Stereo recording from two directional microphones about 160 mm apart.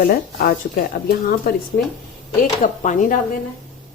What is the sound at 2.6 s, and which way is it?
Speech, 55° left (ahead or behind).